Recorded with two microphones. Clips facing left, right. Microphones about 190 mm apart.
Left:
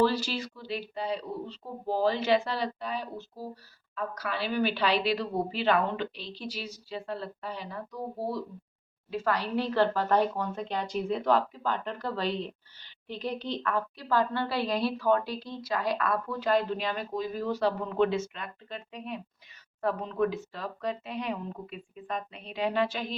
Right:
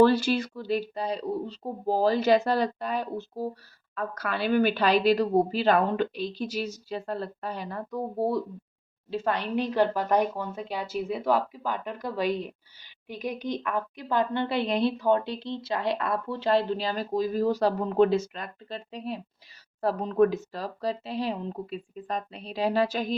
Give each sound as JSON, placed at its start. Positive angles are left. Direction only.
{"t": 0.0, "sound": "speech", "side_deg": -55}
{"t": 9.0, "sound": "a woman's voice", "side_deg": -25}